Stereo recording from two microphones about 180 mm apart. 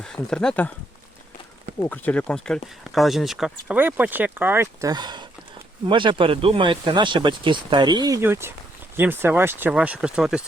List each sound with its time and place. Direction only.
0.0 s speech: 5° left (ahead or behind)
1.8 s speech: 10° left (ahead or behind)